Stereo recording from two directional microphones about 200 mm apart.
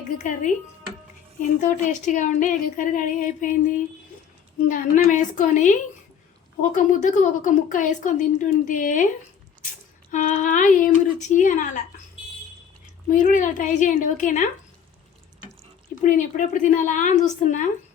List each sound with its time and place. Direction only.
0.2 s speech: 40° left (ahead or behind)
4.7 s speech: 40° left (ahead or behind)
6.7 s speech: 40° left (ahead or behind)
10.1 s speech: 35° left (ahead or behind)
13.1 s speech: 40° left (ahead or behind)
16.0 s speech: 40° left (ahead or behind)